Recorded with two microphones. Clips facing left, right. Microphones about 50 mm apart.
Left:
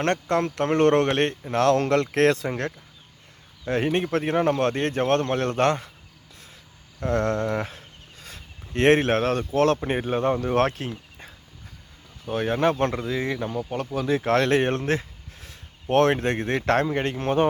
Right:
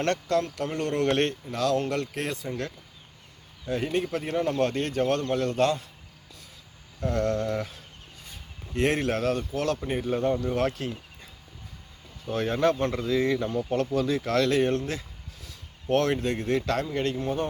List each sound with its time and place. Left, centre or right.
0.0 s speech: left
0.4 s speech: left
1.0 s a man's voice: left
1.8 s speech: left
3.7 s a man's voice: left
7.0 s speech: left
8.2 s speech: left
12.3 s speech: left
14.0 s speech: left
16.9 s speech: left
17.2 s speech: left